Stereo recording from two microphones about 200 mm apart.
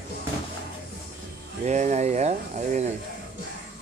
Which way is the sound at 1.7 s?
35° right (ahead or behind).